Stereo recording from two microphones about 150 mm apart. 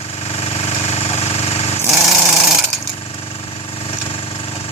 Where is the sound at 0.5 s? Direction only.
45° left (ahead or behind).